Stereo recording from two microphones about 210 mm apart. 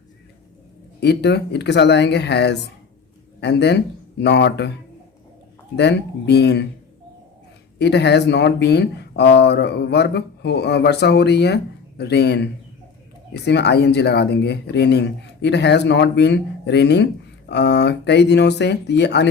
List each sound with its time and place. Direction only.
1.0 s speech: 55° left (ahead or behind)
5.7 s speech: 55° left (ahead or behind)
7.8 s speech: 55° left (ahead or behind)